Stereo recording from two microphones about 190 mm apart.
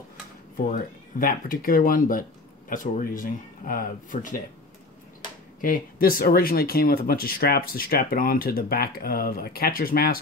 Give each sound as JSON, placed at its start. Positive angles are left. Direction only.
{"t": 0.7, "sound": "speech", "side_deg": 50}
{"t": 5.6, "sound": "speech", "side_deg": 45}